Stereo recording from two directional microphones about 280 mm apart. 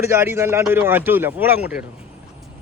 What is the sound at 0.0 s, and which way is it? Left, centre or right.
Speech, centre.